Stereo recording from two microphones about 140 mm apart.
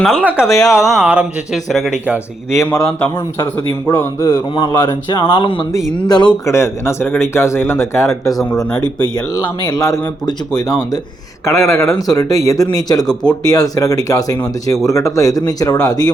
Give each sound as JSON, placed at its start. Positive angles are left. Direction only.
{"t": 0.0, "sound": "speech", "side_deg": 5}
{"t": 2.5, "sound": "a man's voice", "side_deg": 20}
{"t": 4.3, "sound": "speech", "side_deg": 35}
{"t": 6.5, "sound": "speech", "side_deg": 20}